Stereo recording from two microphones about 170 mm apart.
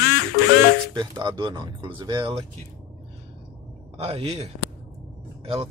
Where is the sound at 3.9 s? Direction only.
35° right (ahead or behind).